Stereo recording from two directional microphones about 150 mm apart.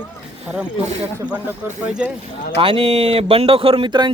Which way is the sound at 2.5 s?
35° right (ahead or behind).